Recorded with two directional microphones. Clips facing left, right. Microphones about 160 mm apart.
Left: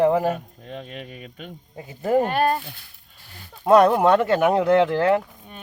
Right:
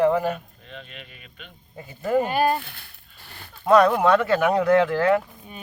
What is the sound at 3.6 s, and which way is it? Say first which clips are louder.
Speech: left 2 dB; 25° left (ahead or behind).